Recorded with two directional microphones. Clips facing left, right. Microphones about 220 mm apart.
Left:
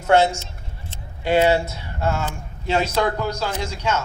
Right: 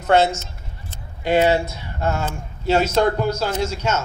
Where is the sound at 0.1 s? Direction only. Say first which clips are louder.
Even; 15° left (ahead or behind).